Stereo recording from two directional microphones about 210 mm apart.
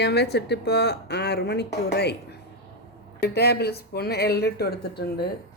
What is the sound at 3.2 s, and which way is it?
Speech, 50° left (ahead or behind).